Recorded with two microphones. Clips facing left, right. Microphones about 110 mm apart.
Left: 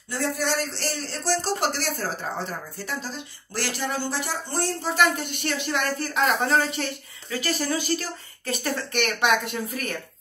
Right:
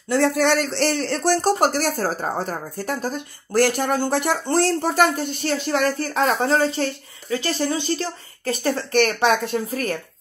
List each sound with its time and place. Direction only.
0.1 s speech: 70° right (ahead or behind)
4.8 s speech: 45° right (ahead or behind)